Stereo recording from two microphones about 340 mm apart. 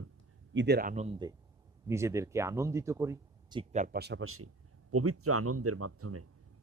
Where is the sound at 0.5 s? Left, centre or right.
Right.